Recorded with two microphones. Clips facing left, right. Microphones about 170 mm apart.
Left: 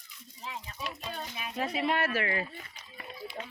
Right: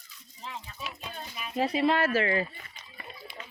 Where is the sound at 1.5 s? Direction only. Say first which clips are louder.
Right 5 dB; 30° right (ahead or behind).